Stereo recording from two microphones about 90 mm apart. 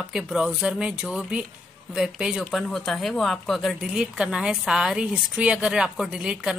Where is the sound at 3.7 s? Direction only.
10° right (ahead or behind).